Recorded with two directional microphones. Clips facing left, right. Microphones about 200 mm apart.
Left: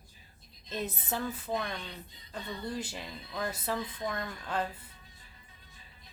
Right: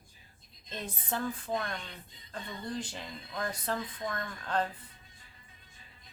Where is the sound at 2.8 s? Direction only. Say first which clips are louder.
Left 1 dB; 5° left (ahead or behind).